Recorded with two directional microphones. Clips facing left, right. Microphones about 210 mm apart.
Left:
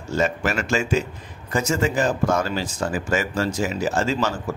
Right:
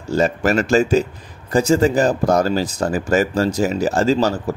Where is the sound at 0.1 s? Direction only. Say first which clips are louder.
Right 6 dB; 35° right (ahead or behind).